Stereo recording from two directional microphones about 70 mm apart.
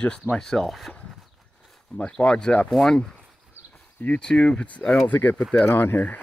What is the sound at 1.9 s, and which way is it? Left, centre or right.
Speech, centre.